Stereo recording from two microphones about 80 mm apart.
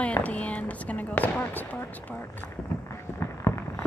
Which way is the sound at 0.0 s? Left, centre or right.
Centre.